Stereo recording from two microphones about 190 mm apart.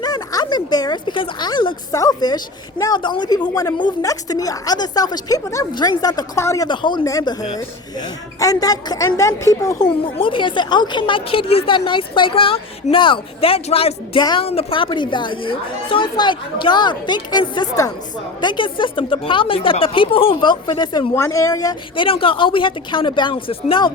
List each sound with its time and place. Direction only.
0.0 s a woman's voice: 20° left (ahead or behind)